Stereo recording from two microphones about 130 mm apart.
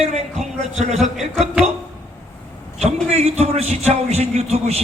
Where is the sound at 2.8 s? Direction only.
55° right (ahead or behind).